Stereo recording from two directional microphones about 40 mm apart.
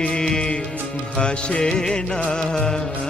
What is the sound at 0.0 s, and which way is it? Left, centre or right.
Music, left.